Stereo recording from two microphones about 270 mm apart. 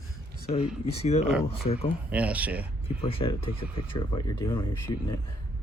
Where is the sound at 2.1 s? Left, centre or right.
Centre.